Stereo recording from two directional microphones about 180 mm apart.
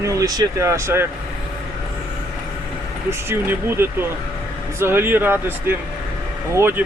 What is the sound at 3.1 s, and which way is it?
Speech, 15° right (ahead or behind).